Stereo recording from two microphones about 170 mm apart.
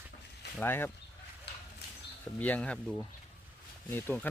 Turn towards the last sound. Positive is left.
turn(degrees=10)  # may be behind; listen again after turning